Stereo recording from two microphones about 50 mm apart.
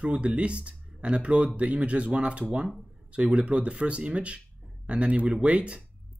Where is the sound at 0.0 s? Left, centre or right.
Right.